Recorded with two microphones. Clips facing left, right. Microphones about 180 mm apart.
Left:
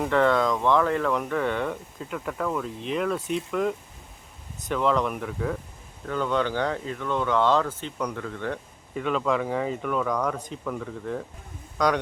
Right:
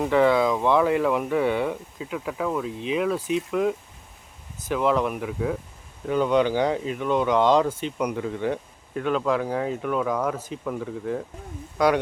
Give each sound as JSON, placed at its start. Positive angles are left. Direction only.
{"t": 0.0, "sound": "speech", "side_deg": -5}
{"t": 9.0, "sound": "speech", "side_deg": 0}